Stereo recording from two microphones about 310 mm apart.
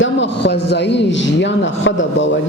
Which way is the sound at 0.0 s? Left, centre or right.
Left.